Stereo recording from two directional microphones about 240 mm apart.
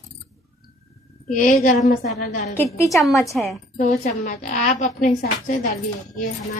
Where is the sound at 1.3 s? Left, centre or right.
Left.